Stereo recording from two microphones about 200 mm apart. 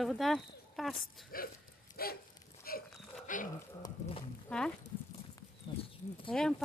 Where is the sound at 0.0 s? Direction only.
Centre (ahead or behind).